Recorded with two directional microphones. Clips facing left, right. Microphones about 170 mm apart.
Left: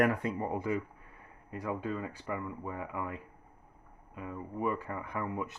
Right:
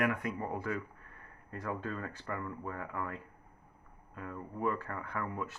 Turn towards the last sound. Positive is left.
turn(degrees=15)  # may be behind; listen again after turning